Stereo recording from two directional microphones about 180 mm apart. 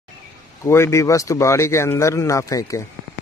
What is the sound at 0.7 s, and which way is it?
Speech, 15° left (ahead or behind).